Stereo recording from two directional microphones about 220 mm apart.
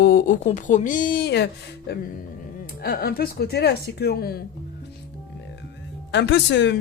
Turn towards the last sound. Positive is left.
turn(degrees=55)  # may be behind; listen again after turning